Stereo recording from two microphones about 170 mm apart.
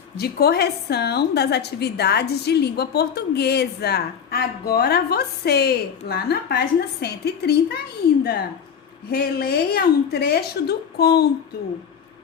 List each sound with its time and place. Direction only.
0.2 s a woman's voice: 70° left (ahead or behind)